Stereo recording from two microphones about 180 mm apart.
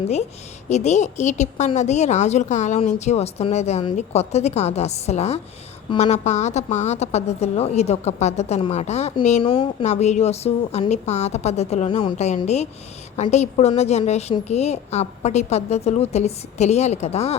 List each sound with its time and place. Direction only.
0.7 s a woman's voice: 40° left (ahead or behind)